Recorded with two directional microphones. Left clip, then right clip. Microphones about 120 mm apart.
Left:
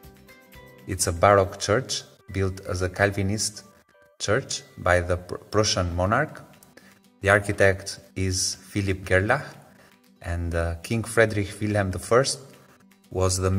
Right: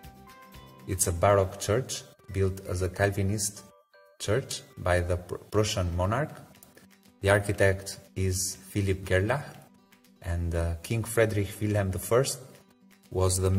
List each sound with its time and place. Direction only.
0.8 s speech: 10° right (ahead or behind)
7.2 s speech: 25° right (ahead or behind)
7.4 s speech: 10° right (ahead or behind)
13.1 s speech: 20° right (ahead or behind)